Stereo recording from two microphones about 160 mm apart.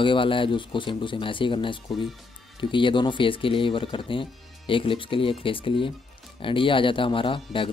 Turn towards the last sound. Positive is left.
turn(degrees=30)  # may be behind; listen again after turning